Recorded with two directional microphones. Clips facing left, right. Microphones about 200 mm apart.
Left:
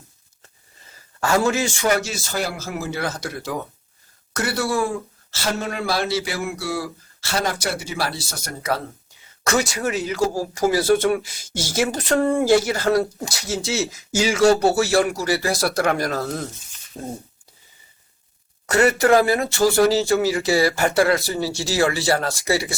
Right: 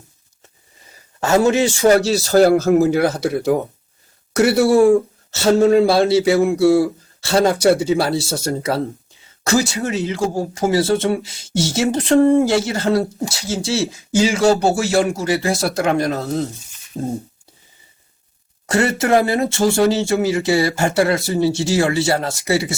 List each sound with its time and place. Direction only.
1.2 s speech: 25° right (ahead or behind)
1.8 s speech: 35° right (ahead or behind)
2.4 s a man's voice: 55° right (ahead or behind); by 3.1 s 40° right (ahead or behind)
3.2 s speech: 60° right (ahead or behind)
4.4 s speech: 25° right (ahead or behind)
18.7 s speech: 25° right (ahead or behind)